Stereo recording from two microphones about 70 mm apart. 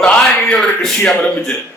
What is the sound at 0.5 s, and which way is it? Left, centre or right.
A man's voice, centre.